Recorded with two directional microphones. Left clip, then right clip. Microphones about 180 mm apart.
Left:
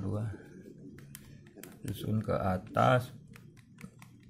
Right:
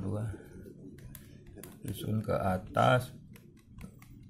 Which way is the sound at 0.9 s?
25° left (ahead or behind).